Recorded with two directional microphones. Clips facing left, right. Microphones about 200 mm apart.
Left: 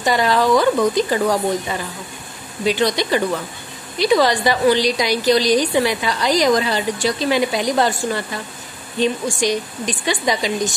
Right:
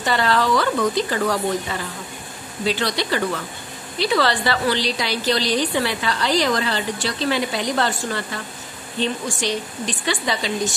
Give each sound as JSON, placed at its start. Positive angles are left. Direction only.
{"t": 0.0, "sound": "a woman's voice", "side_deg": 15}